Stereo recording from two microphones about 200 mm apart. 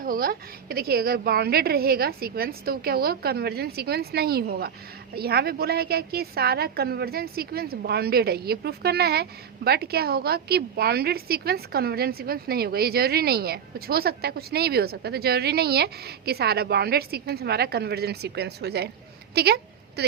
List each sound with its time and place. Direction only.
0.0 s a woman's voice: 45° right (ahead or behind)